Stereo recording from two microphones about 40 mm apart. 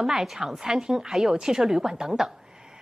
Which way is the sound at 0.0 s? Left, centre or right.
Centre.